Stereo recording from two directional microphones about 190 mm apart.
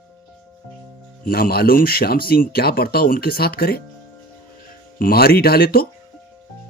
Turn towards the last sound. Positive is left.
turn(degrees=55)  # may be behind; listen again after turning